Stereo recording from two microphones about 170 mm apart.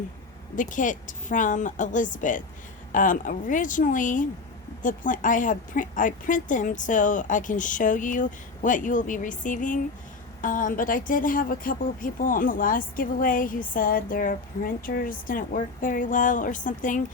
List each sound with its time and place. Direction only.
0.5 s a woman's voice: 50° left (ahead or behind)